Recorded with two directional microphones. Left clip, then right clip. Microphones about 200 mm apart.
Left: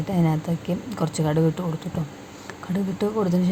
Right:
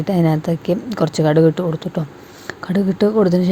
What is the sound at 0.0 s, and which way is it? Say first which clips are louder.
Speech: right 8 dB; 20° right (ahead or behind).